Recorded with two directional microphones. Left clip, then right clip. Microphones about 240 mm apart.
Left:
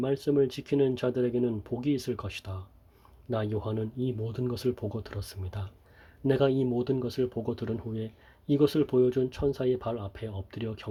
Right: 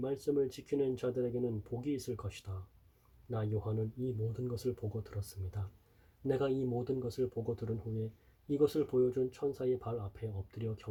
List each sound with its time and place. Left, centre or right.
0.0 s speech: left